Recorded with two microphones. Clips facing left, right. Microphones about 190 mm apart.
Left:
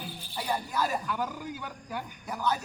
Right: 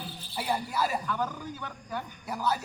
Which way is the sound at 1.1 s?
10° left (ahead or behind).